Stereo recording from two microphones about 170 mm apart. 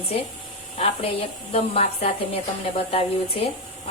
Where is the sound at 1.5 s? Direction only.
35° left (ahead or behind).